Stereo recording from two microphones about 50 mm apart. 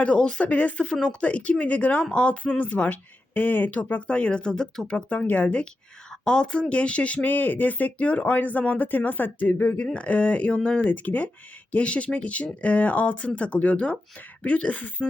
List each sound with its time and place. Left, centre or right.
0.2 s speech: left
10.8 s speech: left